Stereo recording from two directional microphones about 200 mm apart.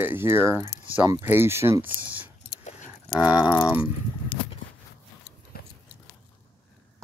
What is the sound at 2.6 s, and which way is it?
Keys jangling, 35° left (ahead or behind).